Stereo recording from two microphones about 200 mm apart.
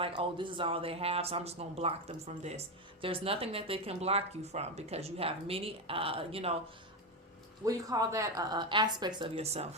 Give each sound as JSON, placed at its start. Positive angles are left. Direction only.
{"t": 0.0, "sound": "speech", "side_deg": -25}
{"t": 7.6, "sound": "speech", "side_deg": -15}